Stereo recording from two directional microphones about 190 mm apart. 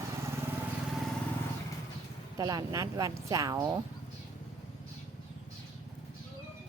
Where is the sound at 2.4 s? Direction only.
20° right (ahead or behind).